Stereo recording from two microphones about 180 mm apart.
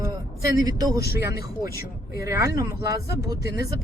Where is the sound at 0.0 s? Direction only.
20° right (ahead or behind).